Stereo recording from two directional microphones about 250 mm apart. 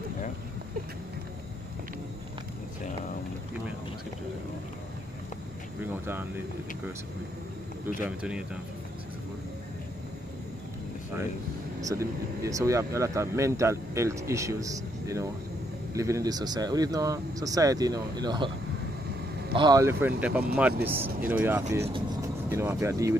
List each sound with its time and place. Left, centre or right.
6.0 s speech: centre
8.2 s speech: centre
11.8 s speech: centre
19.5 s speech: centre